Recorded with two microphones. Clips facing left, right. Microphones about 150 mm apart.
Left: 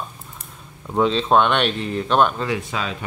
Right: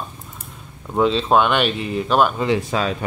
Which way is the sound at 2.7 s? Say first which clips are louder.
Right 5 dB; 40° right (ahead or behind).